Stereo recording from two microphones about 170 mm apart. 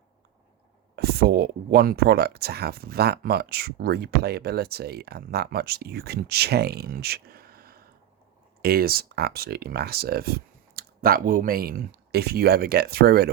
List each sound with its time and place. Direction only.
0.9 s speech: 70° right (ahead or behind)